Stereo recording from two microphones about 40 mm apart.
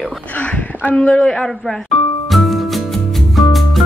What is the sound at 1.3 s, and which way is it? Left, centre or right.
Speech, centre.